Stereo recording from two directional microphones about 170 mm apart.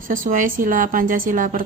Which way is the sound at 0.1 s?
55° right (ahead or behind).